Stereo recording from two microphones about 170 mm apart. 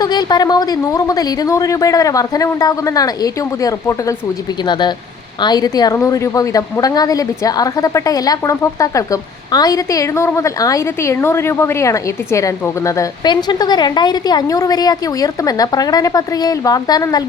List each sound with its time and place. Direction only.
0.0 s a woman's voice: 25° left (ahead or behind)